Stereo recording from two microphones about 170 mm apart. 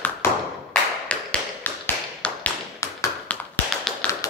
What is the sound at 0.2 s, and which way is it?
Clapping, 15° left (ahead or behind).